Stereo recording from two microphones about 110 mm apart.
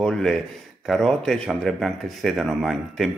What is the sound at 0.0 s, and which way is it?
Speech, 5° left (ahead or behind).